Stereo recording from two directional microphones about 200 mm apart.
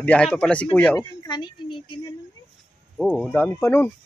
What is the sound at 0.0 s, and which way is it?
Speech, 5° left (ahead or behind).